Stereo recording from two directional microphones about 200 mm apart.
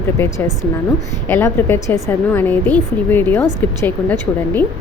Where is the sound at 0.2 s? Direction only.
15° left (ahead or behind).